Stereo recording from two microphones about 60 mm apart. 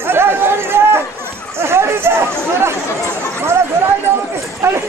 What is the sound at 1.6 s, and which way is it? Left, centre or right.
Run, right.